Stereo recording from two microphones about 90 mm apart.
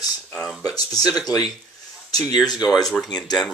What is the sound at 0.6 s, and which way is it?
Speech, 45° left (ahead or behind).